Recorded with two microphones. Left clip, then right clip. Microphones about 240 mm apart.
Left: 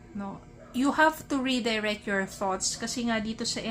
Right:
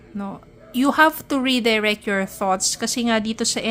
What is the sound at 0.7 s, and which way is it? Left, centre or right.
A woman's voice, right.